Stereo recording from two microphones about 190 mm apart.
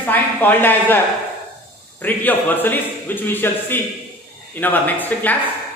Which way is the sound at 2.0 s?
10° left (ahead or behind).